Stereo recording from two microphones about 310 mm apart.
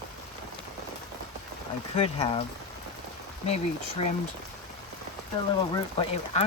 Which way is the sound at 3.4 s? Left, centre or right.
Centre.